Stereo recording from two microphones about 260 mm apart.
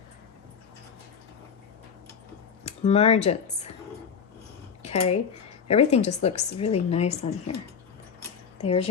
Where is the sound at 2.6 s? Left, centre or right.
Left.